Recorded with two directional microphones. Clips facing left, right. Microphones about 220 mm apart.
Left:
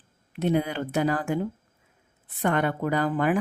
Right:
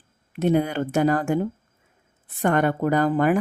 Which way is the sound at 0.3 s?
50° right (ahead or behind).